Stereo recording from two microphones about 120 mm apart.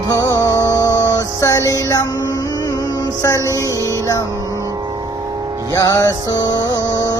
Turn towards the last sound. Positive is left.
turn(degrees=30)  # may be behind; listen again after turning